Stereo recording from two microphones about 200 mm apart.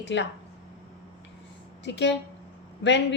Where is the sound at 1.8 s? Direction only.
60° left (ahead or behind).